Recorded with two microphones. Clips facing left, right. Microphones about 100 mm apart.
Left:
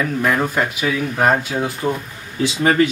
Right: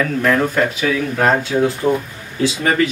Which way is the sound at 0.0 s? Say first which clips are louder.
Right 2 dB; 10° left (ahead or behind).